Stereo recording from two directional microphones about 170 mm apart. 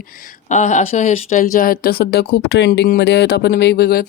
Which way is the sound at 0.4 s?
45° left (ahead or behind).